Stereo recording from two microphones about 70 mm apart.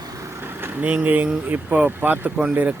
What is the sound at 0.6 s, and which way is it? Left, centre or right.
Speech, right.